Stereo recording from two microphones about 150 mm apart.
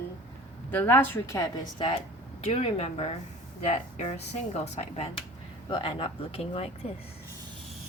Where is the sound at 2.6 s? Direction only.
45° left (ahead or behind).